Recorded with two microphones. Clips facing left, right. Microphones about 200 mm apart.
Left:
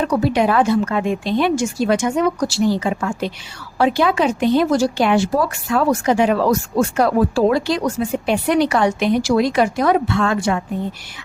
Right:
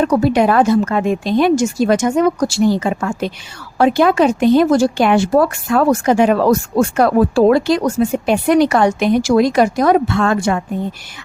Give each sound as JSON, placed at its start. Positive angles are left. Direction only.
{"t": 0.0, "sound": "a woman's voice", "side_deg": -50}